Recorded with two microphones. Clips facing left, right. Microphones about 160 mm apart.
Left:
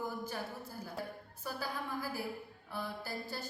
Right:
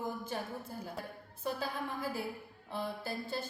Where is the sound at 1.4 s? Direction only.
25° right (ahead or behind).